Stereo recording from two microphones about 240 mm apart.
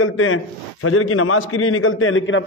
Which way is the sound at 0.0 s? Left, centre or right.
Left.